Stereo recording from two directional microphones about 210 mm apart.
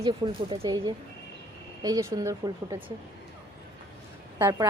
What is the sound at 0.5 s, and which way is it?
A woman's voice, 20° right (ahead or behind).